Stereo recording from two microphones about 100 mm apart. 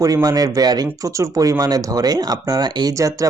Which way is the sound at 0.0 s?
35° right (ahead or behind).